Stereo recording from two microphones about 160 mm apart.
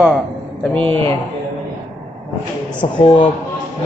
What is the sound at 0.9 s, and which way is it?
Speech, 35° right (ahead or behind).